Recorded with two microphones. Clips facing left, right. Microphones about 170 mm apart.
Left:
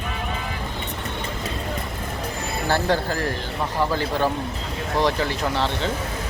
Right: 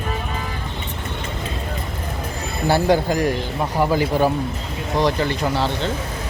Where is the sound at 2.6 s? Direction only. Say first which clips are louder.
Right 5 dB; 15° right (ahead or behind).